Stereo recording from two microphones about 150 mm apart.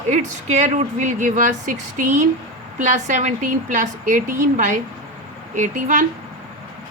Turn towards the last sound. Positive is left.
turn(degrees=-55)  # may be behind; listen again after turning